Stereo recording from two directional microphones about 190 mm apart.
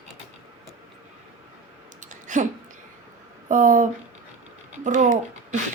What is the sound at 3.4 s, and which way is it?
Speech, 40° right (ahead or behind).